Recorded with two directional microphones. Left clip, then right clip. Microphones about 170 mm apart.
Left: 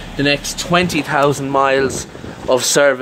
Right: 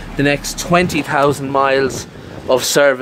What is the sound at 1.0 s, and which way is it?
Speech, 15° right (ahead or behind).